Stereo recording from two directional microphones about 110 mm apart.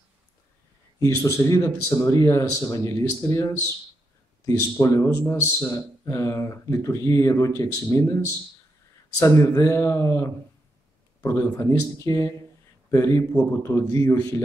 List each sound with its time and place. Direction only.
0.9 s speech: 30° left (ahead or behind)
4.5 s speech: 30° left (ahead or behind)
9.2 s speech: 25° left (ahead or behind)